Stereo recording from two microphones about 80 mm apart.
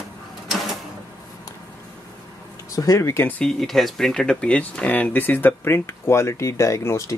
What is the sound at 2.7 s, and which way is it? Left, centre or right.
Speech, left.